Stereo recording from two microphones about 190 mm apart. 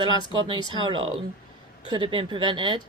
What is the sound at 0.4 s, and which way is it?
Speech, 25° right (ahead or behind).